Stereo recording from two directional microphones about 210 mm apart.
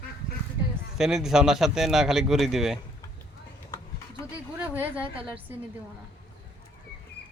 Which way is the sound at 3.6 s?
15° left (ahead or behind).